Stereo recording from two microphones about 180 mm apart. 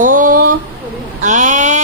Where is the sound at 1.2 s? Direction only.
45° right (ahead or behind).